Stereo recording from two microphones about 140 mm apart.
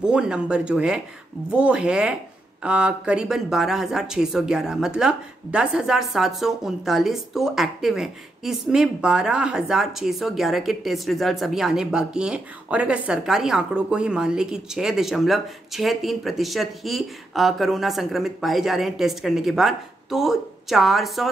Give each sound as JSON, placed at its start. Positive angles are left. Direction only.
{"t": 0.0, "sound": "speech", "side_deg": -5}